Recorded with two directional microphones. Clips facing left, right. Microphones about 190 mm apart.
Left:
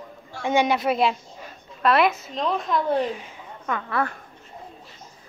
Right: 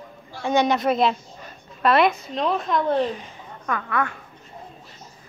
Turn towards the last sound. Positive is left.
turn(degrees=25)  # may be behind; listen again after turning